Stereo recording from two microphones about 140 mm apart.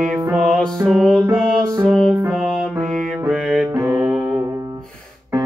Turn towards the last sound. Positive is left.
turn(degrees=-15)  # may be behind; listen again after turning